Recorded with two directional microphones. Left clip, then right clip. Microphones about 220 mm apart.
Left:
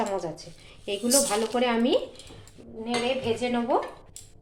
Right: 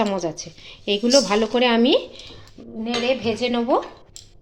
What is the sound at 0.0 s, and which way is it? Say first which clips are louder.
Stir: right 6 dB; 45° right (ahead or behind).